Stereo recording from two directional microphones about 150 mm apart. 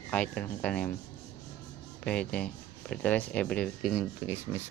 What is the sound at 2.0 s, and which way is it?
Speech, 5° left (ahead or behind).